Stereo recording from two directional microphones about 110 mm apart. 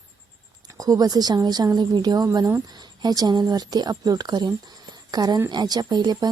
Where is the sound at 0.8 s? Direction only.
35° right (ahead or behind).